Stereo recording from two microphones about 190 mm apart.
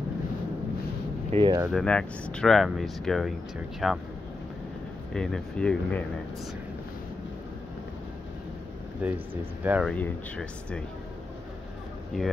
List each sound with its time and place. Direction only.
1.3 s speech: 30° right (ahead or behind)
1.7 s speech: 5° left (ahead or behind)
5.1 s speech: 5° left (ahead or behind)
9.0 s speech: 10° right (ahead or behind)
9.8 s speech: 5° left (ahead or behind)